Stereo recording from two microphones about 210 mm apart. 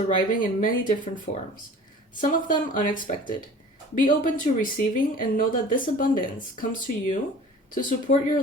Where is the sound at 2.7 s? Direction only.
40° left (ahead or behind).